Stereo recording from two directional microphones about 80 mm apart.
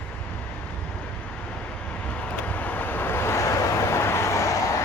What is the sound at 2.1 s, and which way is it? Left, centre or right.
Vehicle, centre.